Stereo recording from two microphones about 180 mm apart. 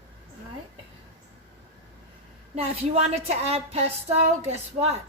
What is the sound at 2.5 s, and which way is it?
A woman's voice, 35° right (ahead or behind).